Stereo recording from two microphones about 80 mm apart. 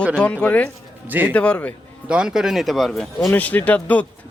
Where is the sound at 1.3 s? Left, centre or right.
Centre.